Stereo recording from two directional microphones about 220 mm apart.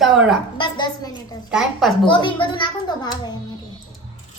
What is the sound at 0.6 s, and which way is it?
Speech, 20° left (ahead or behind).